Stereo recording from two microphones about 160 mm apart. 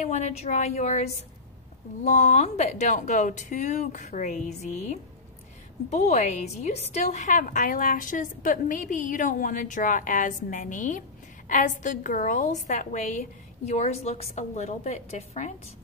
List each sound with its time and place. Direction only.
0.0 s a woman's voice: 45° left (ahead or behind)